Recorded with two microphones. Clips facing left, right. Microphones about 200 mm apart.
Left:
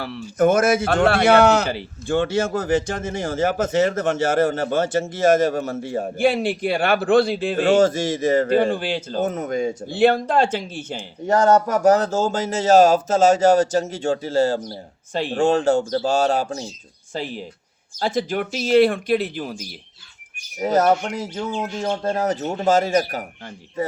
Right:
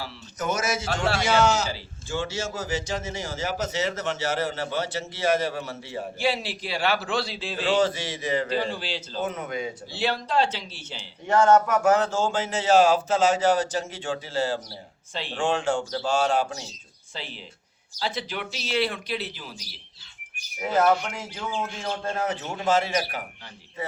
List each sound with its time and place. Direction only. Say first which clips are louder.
0.3 s a man's voice: left 11 dB; 55° left (ahead or behind)
20.6 s speech: left 4 dB; 40° left (ahead or behind)